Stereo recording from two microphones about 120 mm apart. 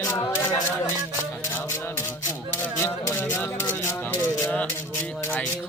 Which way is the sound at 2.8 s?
20° left (ahead or behind).